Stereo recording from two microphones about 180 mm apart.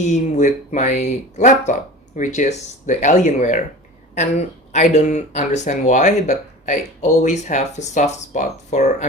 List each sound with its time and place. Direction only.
0.1 s speech: 40° left (ahead or behind)